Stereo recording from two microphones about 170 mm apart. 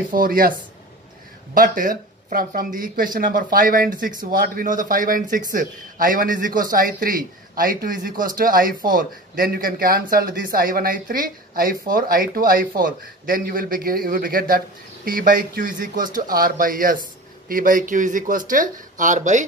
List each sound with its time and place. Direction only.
0.1 s a man's voice: 55° right (ahead or behind)